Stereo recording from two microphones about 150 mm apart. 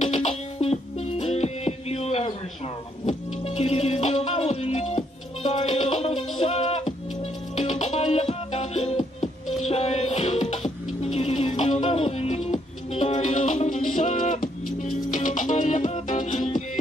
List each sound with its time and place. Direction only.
0.0 s music: 45° left (ahead or behind)